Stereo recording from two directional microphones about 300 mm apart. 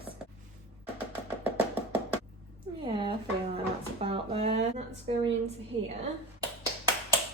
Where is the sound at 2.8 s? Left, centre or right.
Centre.